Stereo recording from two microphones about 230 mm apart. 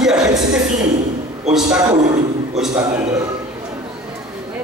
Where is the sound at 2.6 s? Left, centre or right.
Centre.